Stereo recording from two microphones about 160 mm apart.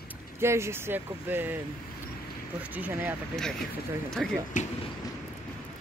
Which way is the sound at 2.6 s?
10° right (ahead or behind).